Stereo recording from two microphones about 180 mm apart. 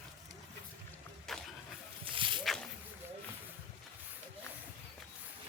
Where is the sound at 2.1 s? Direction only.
30° right (ahead or behind).